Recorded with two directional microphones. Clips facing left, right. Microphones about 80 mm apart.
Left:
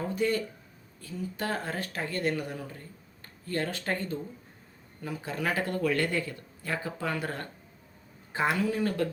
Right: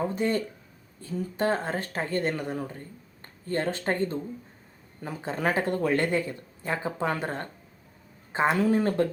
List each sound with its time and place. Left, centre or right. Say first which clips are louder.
0.2 s speech: right 1 dB; right